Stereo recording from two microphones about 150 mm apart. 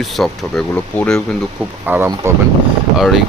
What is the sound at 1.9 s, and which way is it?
Speech, 15° right (ahead or behind).